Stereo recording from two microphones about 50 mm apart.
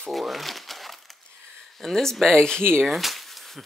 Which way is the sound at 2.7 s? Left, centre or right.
Centre.